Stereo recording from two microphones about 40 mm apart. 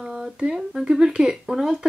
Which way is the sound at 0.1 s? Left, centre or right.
Centre.